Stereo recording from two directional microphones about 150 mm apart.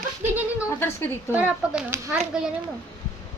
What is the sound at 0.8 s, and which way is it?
Speech, 15° left (ahead or behind).